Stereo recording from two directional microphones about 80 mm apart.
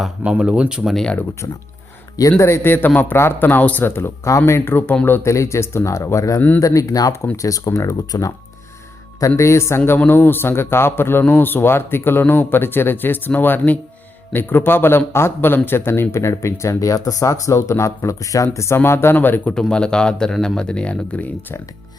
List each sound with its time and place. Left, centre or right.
0.3 s speech: centre
0.9 s speech: centre
2.4 s a man's voice: left
5.3 s a man's voice: left
9.3 s a man's voice: left
19.5 s speech: centre